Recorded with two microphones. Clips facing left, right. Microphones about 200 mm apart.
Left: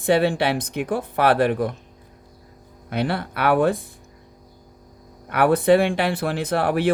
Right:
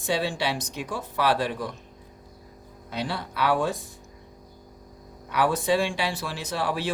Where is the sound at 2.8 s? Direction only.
60° left (ahead or behind).